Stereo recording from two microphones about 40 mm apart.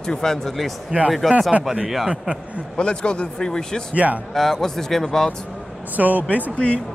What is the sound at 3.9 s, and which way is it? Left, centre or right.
Speech, right.